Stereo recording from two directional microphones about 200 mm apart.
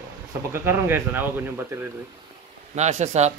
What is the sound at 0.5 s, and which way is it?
Speech, 10° right (ahead or behind).